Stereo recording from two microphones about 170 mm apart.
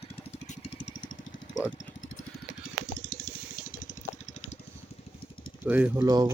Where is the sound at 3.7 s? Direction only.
50° left (ahead or behind).